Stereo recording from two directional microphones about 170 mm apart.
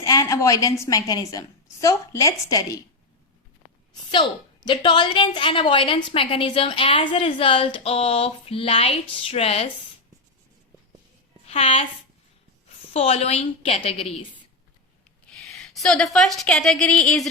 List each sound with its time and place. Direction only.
0.0 s a woman's voice: 20° left (ahead or behind)
4.1 s a woman's voice: 30° left (ahead or behind)
11.4 s a woman's voice: 35° left (ahead or behind)
12.9 s a woman's voice: 35° left (ahead or behind)
15.3 s a woman's voice: 5° left (ahead or behind)